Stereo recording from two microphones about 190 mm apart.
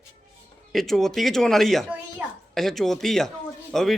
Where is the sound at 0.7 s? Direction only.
Centre (ahead or behind).